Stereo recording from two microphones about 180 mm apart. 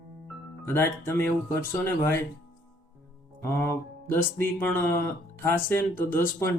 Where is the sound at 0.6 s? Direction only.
15° left (ahead or behind).